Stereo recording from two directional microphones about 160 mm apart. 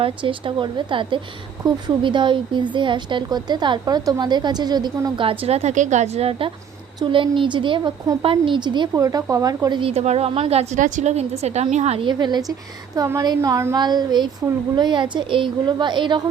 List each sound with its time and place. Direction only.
0.0 s a woman's voice: 30° right (ahead or behind)
9.9 s a woman's voice: 45° right (ahead or behind)